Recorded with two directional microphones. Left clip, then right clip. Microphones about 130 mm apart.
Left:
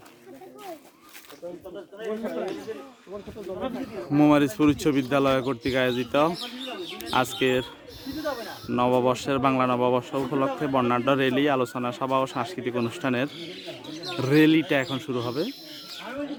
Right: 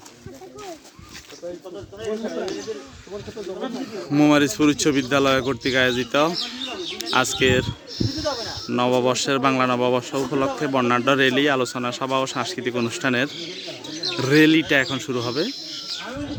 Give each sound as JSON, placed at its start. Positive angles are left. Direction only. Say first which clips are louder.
{"t": 2.0, "sound": "speech", "louder": "right 3 dB", "side_deg": 20}
{"t": 3.9, "sound": "speech", "louder": "right 3 dB", "side_deg": 10}
{"t": 8.2, "sound": "a sound", "louder": "right 3 dB", "side_deg": 25}
{"t": 8.4, "sound": "speech", "louder": "right 1 dB", "side_deg": 5}